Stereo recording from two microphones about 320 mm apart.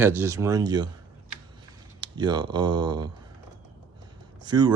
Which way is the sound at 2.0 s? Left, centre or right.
Centre.